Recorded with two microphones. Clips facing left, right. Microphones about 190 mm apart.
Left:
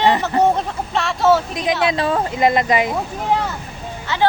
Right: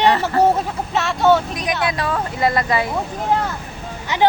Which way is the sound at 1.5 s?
25° left (ahead or behind).